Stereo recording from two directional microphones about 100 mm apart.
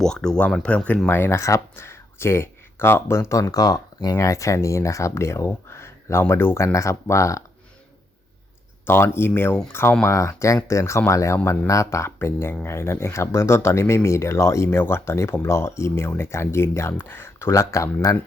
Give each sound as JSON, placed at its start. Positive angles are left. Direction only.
{"t": 0.0, "sound": "speech", "side_deg": 5}
{"t": 1.0, "sound": "speech", "side_deg": 20}
{"t": 8.9, "sound": "speech", "side_deg": 25}